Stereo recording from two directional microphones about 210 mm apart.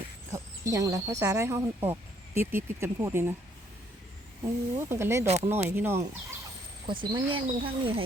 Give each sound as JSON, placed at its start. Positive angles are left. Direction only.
{"t": 0.3, "sound": "speech", "side_deg": -15}
{"t": 4.8, "sound": "speech", "side_deg": -10}
{"t": 6.8, "sound": "speech", "side_deg": -25}